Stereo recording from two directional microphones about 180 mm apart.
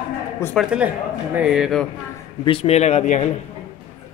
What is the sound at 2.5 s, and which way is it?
Speech, 35° left (ahead or behind).